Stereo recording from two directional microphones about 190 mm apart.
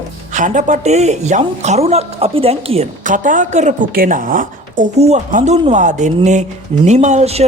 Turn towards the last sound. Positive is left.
turn(degrees=-35)  # may be behind; listen again after turning